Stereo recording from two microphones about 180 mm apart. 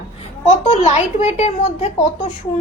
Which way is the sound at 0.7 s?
35° left (ahead or behind).